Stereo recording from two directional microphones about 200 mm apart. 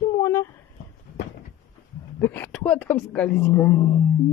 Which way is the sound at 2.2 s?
10° left (ahead or behind).